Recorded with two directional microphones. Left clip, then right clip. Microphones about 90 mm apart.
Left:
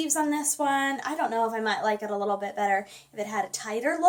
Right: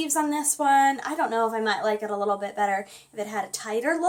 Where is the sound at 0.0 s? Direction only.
40° right (ahead or behind).